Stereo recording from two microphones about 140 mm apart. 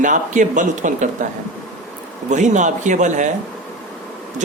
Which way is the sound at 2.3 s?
60° right (ahead or behind).